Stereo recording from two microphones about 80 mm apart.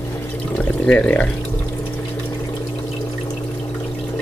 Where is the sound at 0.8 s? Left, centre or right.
Centre.